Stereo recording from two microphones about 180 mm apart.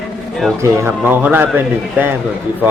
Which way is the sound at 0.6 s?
10° right (ahead or behind).